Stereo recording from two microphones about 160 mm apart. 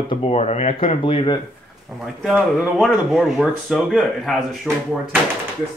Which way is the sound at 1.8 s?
Centre (ahead or behind).